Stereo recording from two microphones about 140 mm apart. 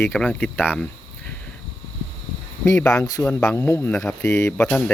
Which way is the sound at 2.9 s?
25° left (ahead or behind).